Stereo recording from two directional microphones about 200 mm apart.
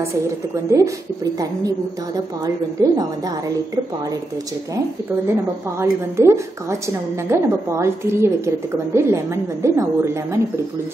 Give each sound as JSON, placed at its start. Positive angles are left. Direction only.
{"t": 0.7, "sound": "a woman's voice", "side_deg": -15}
{"t": 5.8, "sound": "a woman's voice", "side_deg": -15}